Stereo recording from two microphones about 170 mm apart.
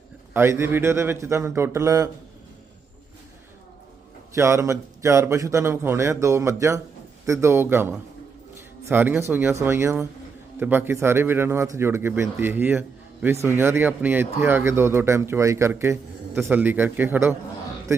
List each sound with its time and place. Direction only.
0.3 s speech: 15° right (ahead or behind)
4.4 s speech: 15° right (ahead or behind)